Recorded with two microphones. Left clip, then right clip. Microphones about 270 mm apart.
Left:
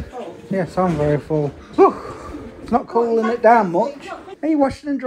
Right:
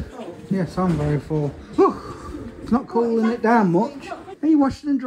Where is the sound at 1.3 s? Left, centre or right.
Left.